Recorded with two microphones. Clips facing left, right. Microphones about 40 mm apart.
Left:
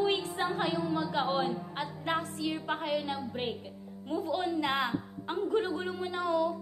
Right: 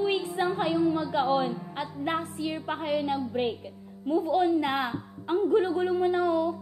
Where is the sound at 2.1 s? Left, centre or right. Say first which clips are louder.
Even; right; by 3.6 s centre.